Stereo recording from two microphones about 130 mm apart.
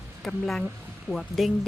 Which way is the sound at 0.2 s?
Centre (ahead or behind).